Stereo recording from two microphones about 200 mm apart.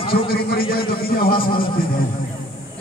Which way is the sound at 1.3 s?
25° left (ahead or behind).